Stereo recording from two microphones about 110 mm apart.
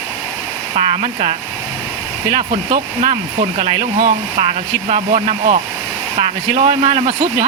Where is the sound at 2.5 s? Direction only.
70° right (ahead or behind).